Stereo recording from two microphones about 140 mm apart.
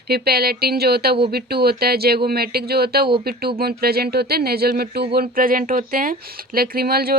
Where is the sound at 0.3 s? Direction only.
90° right.